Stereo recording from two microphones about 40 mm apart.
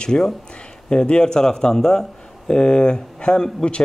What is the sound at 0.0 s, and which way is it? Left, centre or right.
Speech, centre.